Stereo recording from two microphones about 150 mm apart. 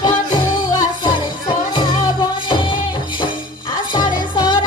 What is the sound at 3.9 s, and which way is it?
Music, 25° left (ahead or behind).